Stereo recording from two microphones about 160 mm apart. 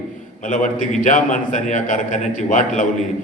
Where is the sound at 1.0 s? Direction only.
50° left (ahead or behind).